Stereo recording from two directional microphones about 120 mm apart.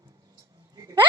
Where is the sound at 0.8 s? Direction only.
30° right (ahead or behind).